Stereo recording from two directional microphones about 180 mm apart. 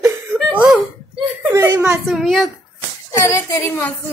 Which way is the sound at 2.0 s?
Centre (ahead or behind).